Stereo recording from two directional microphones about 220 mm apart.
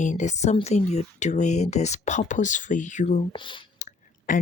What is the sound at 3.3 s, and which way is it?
Speech, 20° left (ahead or behind).